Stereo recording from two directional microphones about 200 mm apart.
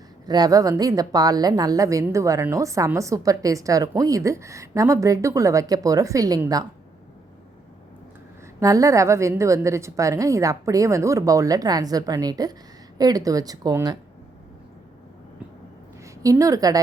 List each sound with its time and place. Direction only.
0.3 s a woman's voice: 20° right (ahead or behind)
8.6 s a woman's voice: 15° right (ahead or behind)
16.2 s a woman's voice: 15° right (ahead or behind)